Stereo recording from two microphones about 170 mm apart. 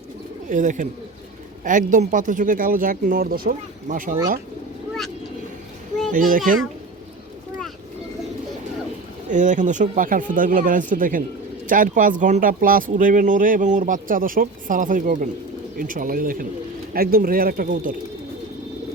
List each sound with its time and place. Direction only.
0.5 s speech: 50° right (ahead or behind)
6.1 s speech: 50° right (ahead or behind)
9.3 s speech: 45° right (ahead or behind)